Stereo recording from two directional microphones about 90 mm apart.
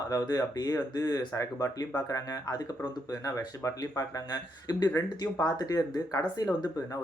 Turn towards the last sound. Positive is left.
turn(degrees=45)  # may be behind; listen again after turning